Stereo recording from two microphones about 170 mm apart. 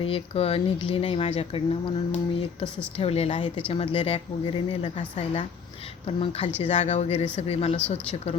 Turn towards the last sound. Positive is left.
turn(degrees=35)  # may be behind; listen again after turning